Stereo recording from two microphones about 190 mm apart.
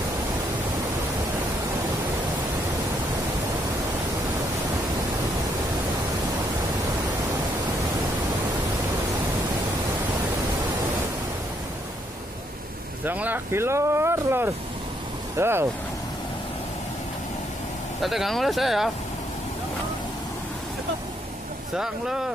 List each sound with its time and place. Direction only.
13.0 s speech: 10° right (ahead or behind)
18.0 s speech: centre (ahead or behind)
21.7 s speech: 5° right (ahead or behind)